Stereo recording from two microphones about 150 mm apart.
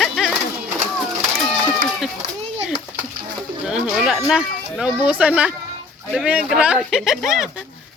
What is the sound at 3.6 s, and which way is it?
Speech, 5° right (ahead or behind).